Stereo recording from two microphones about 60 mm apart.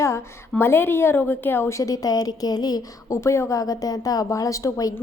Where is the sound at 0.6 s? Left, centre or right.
Left.